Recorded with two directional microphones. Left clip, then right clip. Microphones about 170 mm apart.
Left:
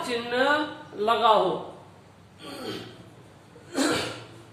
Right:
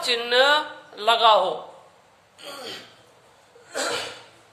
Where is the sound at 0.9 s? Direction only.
75° right (ahead or behind).